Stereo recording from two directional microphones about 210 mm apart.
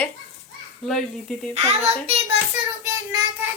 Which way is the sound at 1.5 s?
30° right (ahead or behind).